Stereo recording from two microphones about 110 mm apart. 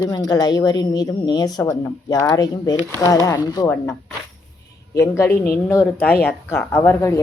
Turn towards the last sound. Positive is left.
turn(degrees=25)  # may be behind; listen again after turning